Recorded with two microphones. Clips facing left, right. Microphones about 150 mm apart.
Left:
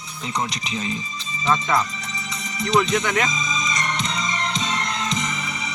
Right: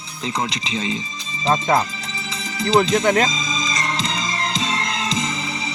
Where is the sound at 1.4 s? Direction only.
35° right (ahead or behind).